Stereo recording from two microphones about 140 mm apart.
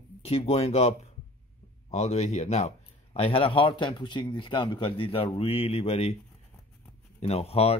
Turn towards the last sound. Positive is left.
turn(degrees=45)  # may be behind; listen again after turning